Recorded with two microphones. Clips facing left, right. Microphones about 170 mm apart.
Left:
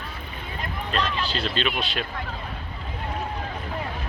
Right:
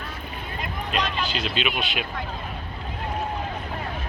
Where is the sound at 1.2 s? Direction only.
35° left (ahead or behind).